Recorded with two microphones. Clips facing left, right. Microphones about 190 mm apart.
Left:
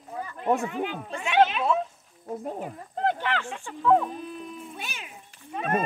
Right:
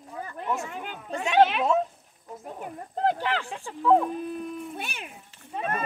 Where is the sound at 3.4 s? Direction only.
35° right (ahead or behind).